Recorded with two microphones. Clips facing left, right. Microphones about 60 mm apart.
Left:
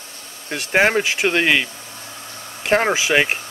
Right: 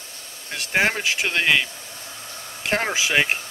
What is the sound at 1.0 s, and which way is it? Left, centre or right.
Speech, centre.